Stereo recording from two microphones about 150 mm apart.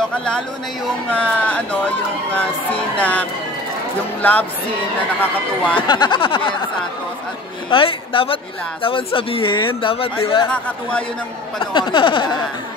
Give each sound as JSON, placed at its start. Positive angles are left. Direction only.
{"t": 1.1, "sound": "speech", "side_deg": 10}
{"t": 5.8, "sound": "speech", "side_deg": 30}
{"t": 7.7, "sound": "speech", "side_deg": 35}
{"t": 10.5, "sound": "speech", "side_deg": 10}
{"t": 11.6, "sound": "speech", "side_deg": 30}